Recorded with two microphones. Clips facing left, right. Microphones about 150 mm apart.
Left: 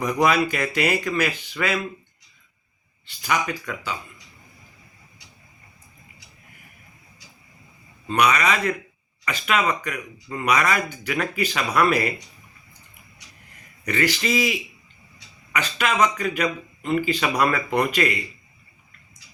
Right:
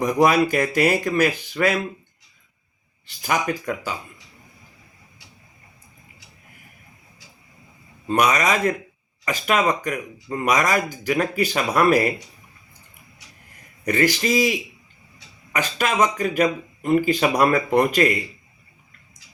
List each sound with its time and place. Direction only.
0.0 s speech: 40° right (ahead or behind)
3.2 s speech: 45° right (ahead or behind)
8.1 s speech: 40° right (ahead or behind)
13.8 s speech: 45° right (ahead or behind)